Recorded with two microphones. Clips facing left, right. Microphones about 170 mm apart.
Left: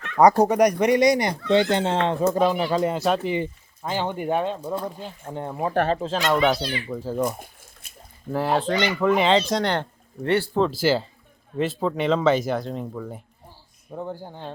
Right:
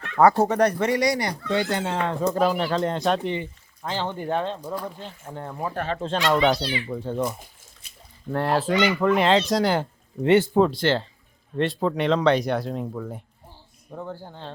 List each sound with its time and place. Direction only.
0.2 s speech: 15° left (ahead or behind)
2.4 s speech: centre (ahead or behind); by 5.7 s 20° left (ahead or behind)
6.0 s speech: centre (ahead or behind)
7.3 s a sound: 55° left (ahead or behind)
8.3 s speech: centre (ahead or behind)
10.2 s speech: 20° right (ahead or behind)
10.6 s speech: 5° left (ahead or behind)
13.9 s speech: 15° left (ahead or behind)